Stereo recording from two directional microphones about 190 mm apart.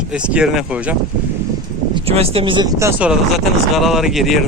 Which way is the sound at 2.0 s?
30° right (ahead or behind).